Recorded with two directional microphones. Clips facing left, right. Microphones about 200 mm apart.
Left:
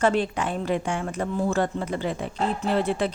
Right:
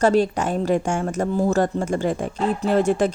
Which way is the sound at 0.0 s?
40° right (ahead or behind).